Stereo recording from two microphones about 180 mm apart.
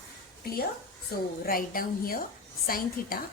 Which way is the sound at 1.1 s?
55° left (ahead or behind).